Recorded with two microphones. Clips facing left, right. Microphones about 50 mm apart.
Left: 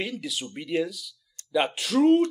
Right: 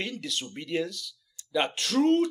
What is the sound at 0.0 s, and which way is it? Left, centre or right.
Speech, centre.